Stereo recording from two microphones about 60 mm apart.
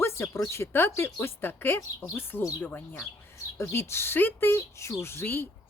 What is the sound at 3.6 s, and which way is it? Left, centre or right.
Speech, left.